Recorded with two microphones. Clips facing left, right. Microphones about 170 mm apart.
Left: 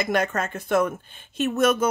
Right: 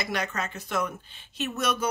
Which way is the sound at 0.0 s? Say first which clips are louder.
Left 7 dB; 50° left (ahead or behind).